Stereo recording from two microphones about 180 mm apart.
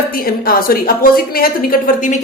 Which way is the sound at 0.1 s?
55° left (ahead or behind).